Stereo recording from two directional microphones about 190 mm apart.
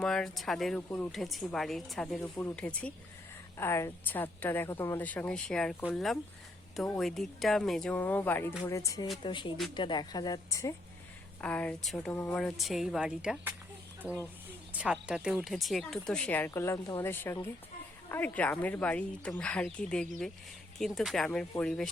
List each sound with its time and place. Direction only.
0.0 s speech: 5° left (ahead or behind)
2.3 s a woman's voice: 10° left (ahead or behind); by 13.5 s 5° right (ahead or behind)
14.7 s a woman's voice: 5° right (ahead or behind)